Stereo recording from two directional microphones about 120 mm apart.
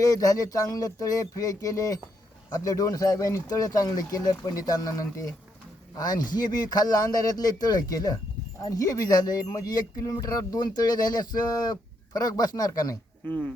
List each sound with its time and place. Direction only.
0.0 s speech: 30° left (ahead or behind)
13.2 s speech: 15° left (ahead or behind)